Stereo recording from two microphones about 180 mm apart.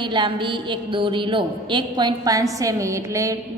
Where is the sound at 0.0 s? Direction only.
25° right (ahead or behind).